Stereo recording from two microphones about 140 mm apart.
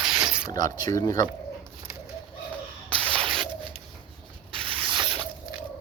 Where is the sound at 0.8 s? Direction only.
25° left (ahead or behind).